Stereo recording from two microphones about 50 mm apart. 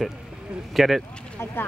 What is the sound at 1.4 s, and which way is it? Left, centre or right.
Speech, left.